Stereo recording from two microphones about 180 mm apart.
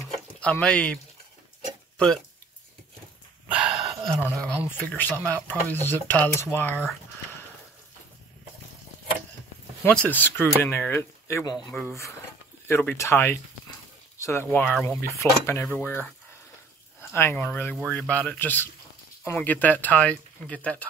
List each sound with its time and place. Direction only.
0.4 s speech: 5° left (ahead or behind)
2.0 s speech: 5° left (ahead or behind)
3.4 s dog: 5° right (ahead or behind)
4.6 s speech: 10° left (ahead or behind)
9.8 s speech: 10° left (ahead or behind)
17.1 s speech: 15° left (ahead or behind)